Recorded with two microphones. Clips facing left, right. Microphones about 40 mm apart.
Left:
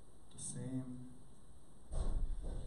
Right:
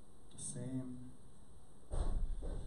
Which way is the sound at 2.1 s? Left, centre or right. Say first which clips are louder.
Right 2 dB; centre.